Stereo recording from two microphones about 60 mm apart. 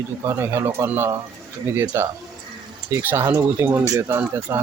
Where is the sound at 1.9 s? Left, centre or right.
Right.